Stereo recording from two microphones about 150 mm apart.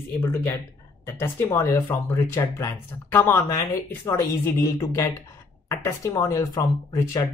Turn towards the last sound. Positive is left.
turn(degrees=20)  # may be behind; listen again after turning